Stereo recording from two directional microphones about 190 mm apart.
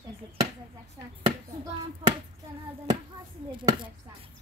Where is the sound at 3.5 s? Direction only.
25° right (ahead or behind).